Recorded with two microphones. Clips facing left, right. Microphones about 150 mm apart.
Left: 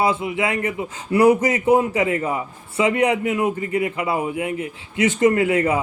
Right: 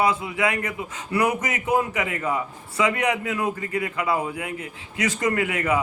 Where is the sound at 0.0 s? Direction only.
25° left (ahead or behind).